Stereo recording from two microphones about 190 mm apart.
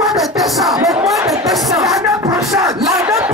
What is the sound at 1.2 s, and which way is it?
Music, 15° right (ahead or behind).